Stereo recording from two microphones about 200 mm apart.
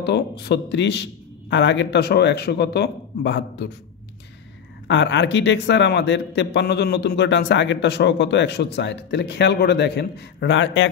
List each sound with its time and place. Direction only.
0.0 s a man's voice: 55° left (ahead or behind)
4.8 s a man's voice: 65° left (ahead or behind)